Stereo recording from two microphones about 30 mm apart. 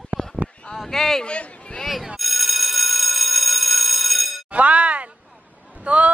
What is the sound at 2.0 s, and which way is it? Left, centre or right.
Telephone bell ringing, centre.